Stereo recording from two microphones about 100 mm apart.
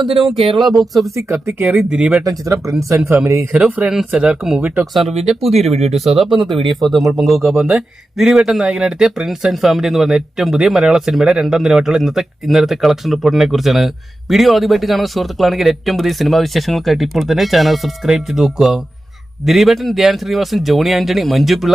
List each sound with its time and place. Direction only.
0.3 s speech: 65° right (ahead or behind)
0.7 s speech: centre (ahead or behind)
1.1 s speech: 30° right (ahead or behind); by 2.2 s 10° right (ahead or behind)
2.2 s speech: 35° right (ahead or behind)
3.5 s speech: 10° right (ahead or behind)
5.5 s speech: 90° right
6.4 s speech: centre (ahead or behind)